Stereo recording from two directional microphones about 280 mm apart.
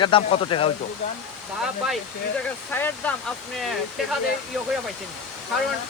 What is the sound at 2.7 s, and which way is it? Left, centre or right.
Speech, centre.